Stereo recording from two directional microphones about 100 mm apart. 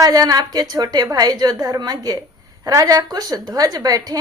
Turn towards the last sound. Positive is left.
turn(degrees=-40)  # may be behind; listen again after turning